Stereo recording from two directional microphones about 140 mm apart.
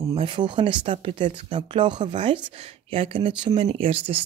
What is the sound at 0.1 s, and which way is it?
Speech, 35° right (ahead or behind).